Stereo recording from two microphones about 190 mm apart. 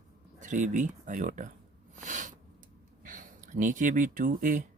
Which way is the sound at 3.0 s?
45° right (ahead or behind).